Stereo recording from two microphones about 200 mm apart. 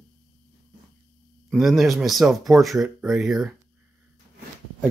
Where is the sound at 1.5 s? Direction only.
Centre (ahead or behind).